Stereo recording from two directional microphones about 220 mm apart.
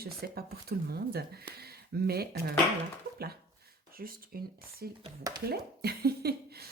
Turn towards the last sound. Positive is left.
turn(degrees=-45)  # may be behind; listen again after turning